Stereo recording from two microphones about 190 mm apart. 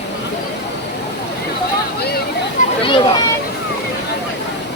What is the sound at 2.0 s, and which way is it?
Vehicle, 55° left (ahead or behind).